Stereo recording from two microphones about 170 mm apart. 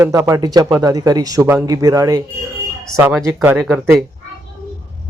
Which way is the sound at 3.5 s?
Centre (ahead or behind).